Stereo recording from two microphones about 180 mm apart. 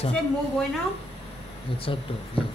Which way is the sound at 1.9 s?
30° left (ahead or behind).